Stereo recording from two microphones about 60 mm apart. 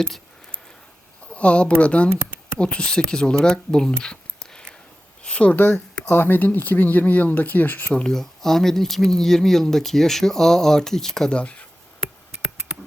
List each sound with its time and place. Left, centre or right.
1.3 s speech: centre
2.1 s a sound: right
2.6 s speech: centre
5.2 s a sound: centre
6.1 s speech: left; by 11.3 s centre
11.3 s speech: centre